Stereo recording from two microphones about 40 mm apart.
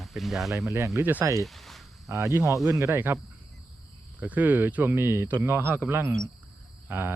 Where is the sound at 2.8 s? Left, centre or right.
Right.